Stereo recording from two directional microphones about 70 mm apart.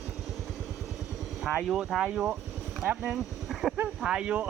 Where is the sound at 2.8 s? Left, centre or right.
Right.